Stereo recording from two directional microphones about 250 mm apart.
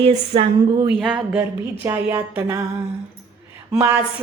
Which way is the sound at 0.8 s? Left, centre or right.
Centre.